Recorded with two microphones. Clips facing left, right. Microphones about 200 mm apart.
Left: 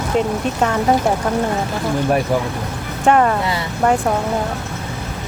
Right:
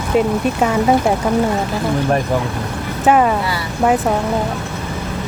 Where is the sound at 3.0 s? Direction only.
5° right (ahead or behind).